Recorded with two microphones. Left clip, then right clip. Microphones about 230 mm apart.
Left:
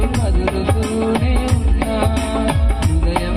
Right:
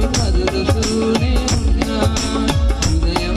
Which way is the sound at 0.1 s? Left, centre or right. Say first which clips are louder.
Right 1 dB; right.